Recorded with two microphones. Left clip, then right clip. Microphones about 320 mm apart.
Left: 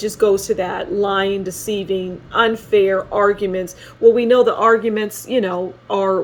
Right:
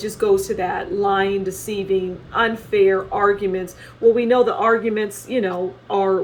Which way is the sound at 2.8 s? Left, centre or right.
Left.